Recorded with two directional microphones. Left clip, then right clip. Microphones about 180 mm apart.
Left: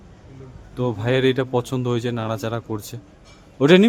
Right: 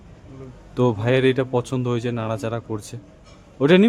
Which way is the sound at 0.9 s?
5° right (ahead or behind).